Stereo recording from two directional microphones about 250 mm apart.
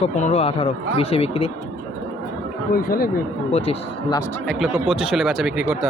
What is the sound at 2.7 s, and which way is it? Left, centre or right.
Speech, left.